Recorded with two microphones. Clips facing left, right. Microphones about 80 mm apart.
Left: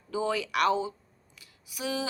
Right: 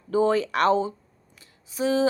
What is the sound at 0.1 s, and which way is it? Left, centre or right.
A woman's voice, right.